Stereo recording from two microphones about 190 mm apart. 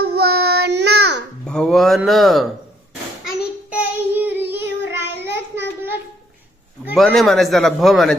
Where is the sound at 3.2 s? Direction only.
5° right (ahead or behind).